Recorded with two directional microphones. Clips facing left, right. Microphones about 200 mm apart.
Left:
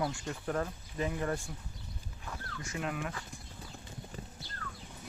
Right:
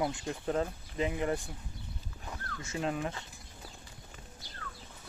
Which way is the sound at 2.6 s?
25° right (ahead or behind).